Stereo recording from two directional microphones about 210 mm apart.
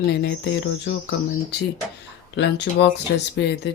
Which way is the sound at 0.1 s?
55° left (ahead or behind).